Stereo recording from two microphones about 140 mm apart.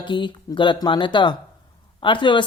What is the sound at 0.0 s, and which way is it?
Speech, 35° left (ahead or behind).